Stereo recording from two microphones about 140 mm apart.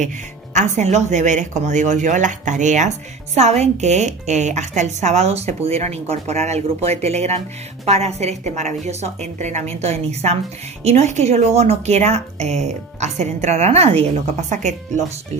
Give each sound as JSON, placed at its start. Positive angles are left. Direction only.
{"t": 0.5, "sound": "a woman's voice", "side_deg": -55}
{"t": 14.5, "sound": "a woman's voice", "side_deg": -60}